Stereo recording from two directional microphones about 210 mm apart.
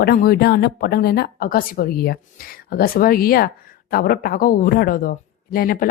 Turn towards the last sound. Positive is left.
turn(degrees=45)  # may be behind; listen again after turning